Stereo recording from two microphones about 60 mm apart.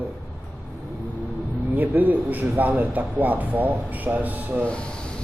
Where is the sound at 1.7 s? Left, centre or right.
Right.